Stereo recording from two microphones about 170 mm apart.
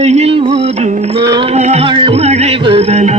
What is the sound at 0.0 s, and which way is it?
Music, 40° right (ahead or behind).